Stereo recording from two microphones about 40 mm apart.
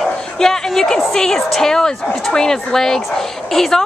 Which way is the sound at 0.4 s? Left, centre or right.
Centre.